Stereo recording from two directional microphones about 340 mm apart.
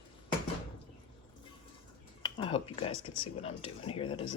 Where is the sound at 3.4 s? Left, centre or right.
Centre.